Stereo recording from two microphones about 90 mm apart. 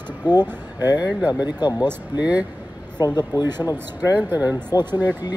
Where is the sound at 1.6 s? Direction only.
45° left (ahead or behind).